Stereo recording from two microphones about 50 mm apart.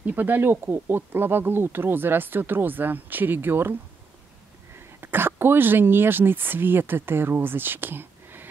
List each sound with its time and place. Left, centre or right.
0.0 s speech: right
4.7 s speech: right